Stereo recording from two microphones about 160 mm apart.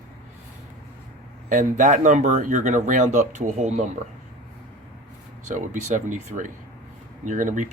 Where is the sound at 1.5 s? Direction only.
50° right (ahead or behind).